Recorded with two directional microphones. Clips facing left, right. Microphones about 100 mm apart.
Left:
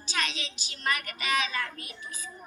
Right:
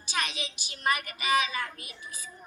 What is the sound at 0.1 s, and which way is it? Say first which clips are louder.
A woman's voice: even; 15° right (ahead or behind).